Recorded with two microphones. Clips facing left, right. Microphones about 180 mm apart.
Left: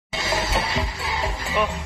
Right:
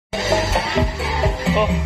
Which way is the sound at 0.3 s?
70° right (ahead or behind).